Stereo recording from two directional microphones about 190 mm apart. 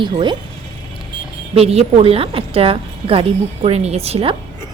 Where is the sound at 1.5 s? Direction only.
30° right (ahead or behind).